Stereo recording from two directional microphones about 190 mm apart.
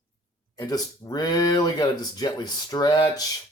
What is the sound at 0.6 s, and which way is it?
Speech, 20° left (ahead or behind).